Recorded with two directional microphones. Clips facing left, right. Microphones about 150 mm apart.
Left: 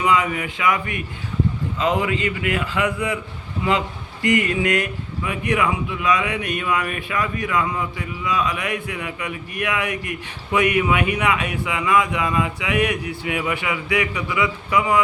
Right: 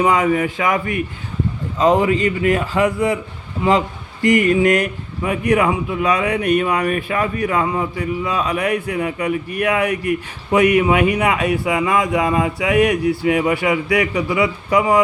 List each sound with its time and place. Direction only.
0.0 s speech: 40° right (ahead or behind)